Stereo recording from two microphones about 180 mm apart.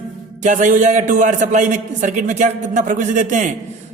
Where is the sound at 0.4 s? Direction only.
45° right (ahead or behind).